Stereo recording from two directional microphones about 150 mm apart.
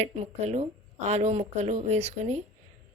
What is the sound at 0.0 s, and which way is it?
A woman's voice, 50° right (ahead or behind).